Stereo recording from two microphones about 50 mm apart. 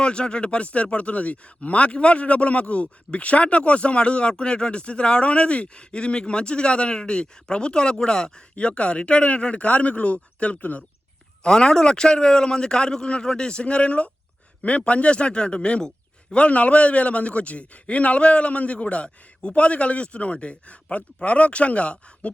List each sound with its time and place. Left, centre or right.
0.0 s speech: centre
11.4 s a man's voice: centre